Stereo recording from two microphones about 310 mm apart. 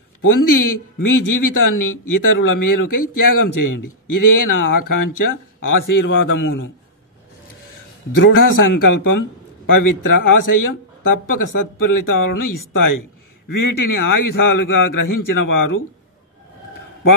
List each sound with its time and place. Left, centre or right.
0.2 s a man's voice: left
6.3 s a man's voice: left
8.3 s a man's voice: left